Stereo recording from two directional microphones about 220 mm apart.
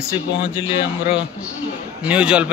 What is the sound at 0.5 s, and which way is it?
Speech, 20° left (ahead or behind).